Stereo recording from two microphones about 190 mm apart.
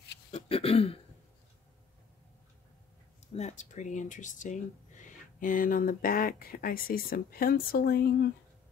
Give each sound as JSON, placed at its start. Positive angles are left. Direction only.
{"t": 0.3, "sound": "throat clearing", "side_deg": 30}
{"t": 3.3, "sound": "speech", "side_deg": 35}